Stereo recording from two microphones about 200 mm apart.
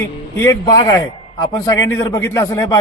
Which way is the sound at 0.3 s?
15° left (ahead or behind).